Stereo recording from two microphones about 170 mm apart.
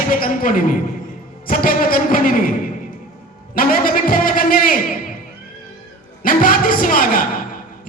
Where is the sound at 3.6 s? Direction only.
55° left (ahead or behind).